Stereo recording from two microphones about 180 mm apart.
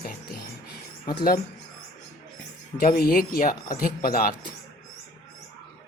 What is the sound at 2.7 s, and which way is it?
Speech, 55° left (ahead or behind).